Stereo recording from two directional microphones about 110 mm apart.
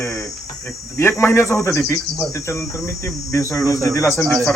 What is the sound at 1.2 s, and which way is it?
Speech, 25° left (ahead or behind).